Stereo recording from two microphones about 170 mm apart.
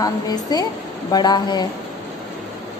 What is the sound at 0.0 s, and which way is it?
A woman's voice, 25° left (ahead or behind).